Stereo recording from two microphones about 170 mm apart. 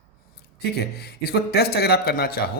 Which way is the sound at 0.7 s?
75° left (ahead or behind).